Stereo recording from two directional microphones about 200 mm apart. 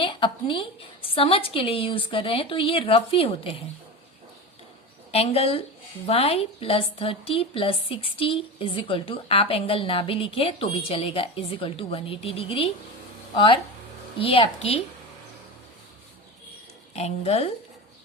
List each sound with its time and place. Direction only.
0.0 s a woman's voice: 25° left (ahead or behind)
5.1 s a woman's voice: 30° left (ahead or behind)
16.9 s a woman's voice: 30° left (ahead or behind)